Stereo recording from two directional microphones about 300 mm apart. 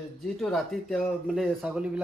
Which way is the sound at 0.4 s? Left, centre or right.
Centre.